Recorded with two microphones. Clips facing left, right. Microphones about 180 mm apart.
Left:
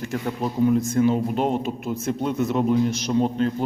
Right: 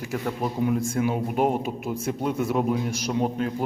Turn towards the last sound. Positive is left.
turn(degrees=-10)  # may be behind; listen again after turning